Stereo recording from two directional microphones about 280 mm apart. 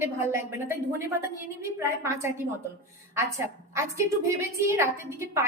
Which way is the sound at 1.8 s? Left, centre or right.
Centre.